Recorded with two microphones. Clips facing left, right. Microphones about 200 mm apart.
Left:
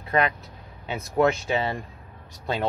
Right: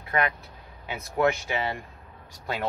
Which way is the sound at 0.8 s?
25° left (ahead or behind).